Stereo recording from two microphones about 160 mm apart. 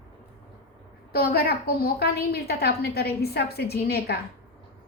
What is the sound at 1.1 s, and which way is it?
A woman's voice, 75° left (ahead or behind).